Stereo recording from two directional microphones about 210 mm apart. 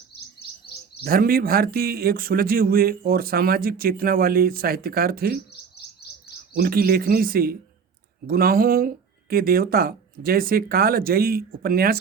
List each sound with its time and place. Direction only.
1.0 s a man's voice: 45° right (ahead or behind)
6.6 s a man's voice: 45° right (ahead or behind)